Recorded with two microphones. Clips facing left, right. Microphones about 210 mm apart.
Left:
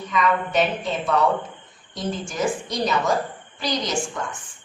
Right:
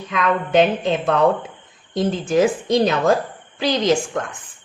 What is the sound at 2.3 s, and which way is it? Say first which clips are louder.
Speech: right 11 dB; 90° right.